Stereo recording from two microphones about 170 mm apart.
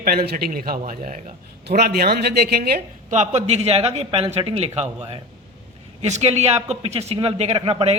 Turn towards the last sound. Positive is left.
turn(degrees=-35)  # may be behind; listen again after turning